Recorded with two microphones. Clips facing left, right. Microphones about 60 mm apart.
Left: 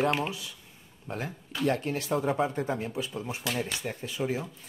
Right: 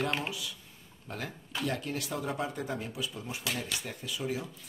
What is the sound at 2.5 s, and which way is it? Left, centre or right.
Speech, left.